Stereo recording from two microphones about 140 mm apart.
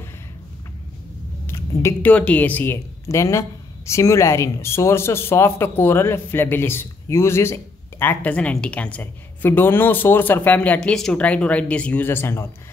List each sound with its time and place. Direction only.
1.5 s a woman's voice: 20° left (ahead or behind)